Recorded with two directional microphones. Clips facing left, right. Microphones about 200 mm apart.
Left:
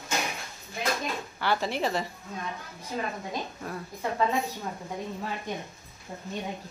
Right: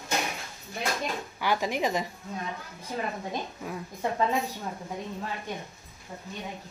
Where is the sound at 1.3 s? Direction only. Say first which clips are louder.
Even; 10° right (ahead or behind).